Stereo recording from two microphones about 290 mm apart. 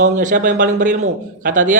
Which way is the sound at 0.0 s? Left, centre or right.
Right.